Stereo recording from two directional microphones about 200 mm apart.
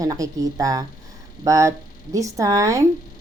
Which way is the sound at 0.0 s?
20° right (ahead or behind).